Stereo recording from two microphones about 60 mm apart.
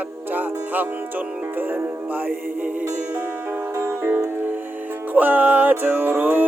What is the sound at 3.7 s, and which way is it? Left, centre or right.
Music, right.